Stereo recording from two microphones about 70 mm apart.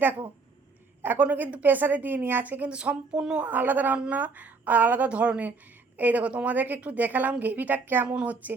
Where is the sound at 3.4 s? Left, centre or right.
Right.